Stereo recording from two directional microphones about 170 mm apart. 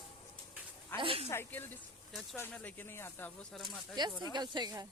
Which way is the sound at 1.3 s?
15° left (ahead or behind).